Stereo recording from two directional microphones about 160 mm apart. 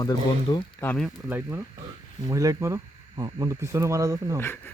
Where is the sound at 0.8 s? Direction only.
10° left (ahead or behind).